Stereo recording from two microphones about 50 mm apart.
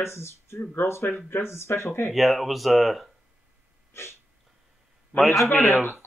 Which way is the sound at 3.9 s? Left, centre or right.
Left.